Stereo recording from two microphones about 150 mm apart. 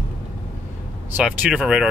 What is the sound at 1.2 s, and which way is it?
Speech, 5° right (ahead or behind).